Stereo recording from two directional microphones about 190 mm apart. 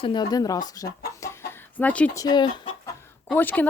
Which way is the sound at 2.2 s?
20° left (ahead or behind).